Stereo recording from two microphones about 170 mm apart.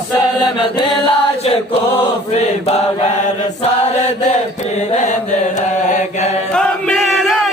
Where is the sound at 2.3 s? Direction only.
40° left (ahead or behind).